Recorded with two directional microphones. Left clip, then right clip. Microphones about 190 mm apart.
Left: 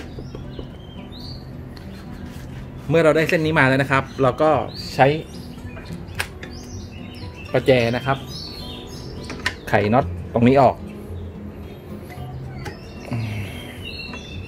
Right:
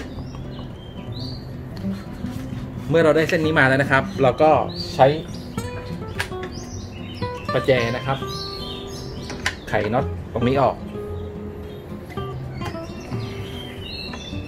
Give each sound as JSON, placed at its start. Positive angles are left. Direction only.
{"t": 2.9, "sound": "speech", "side_deg": 35}
{"t": 4.2, "sound": "speech", "side_deg": 10}
{"t": 5.0, "sound": "speech", "side_deg": 40}
{"t": 7.5, "sound": "speech", "side_deg": 50}
{"t": 9.7, "sound": "speech", "side_deg": 50}